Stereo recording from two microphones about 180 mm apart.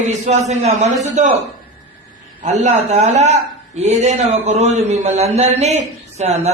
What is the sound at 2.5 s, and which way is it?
A man's voice, 40° right (ahead or behind).